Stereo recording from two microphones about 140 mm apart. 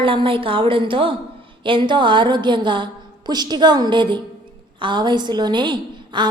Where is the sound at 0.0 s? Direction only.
40° right (ahead or behind).